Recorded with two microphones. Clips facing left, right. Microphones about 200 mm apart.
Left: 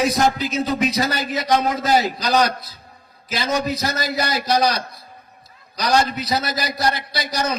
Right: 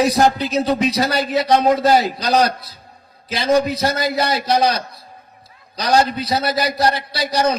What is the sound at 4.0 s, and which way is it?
Speech, 55° right (ahead or behind).